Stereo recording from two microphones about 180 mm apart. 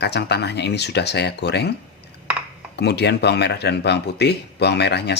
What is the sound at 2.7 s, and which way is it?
Speech, 70° left (ahead or behind).